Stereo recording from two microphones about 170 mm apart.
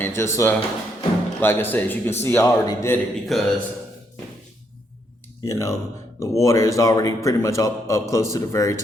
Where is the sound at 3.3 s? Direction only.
Centre (ahead or behind).